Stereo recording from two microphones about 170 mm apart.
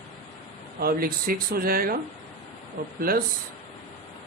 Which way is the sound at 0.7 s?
60° right (ahead or behind).